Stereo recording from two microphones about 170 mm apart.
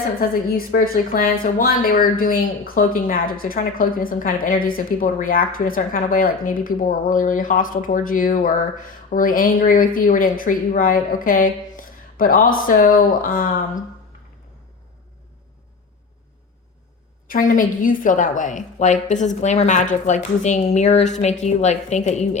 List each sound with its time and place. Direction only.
0.2 s a woman's voice: 55° left (ahead or behind)
17.2 s a woman's voice: 50° left (ahead or behind)